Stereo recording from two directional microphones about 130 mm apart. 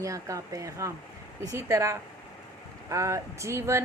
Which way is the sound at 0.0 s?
25° right (ahead or behind).